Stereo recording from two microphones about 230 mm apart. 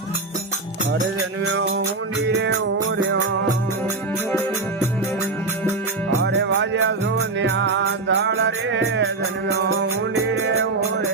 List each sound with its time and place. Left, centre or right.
2.2 s music: right
6.2 s music: right
10.4 s music: right